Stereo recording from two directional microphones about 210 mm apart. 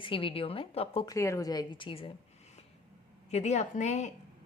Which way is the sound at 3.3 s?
30° left (ahead or behind).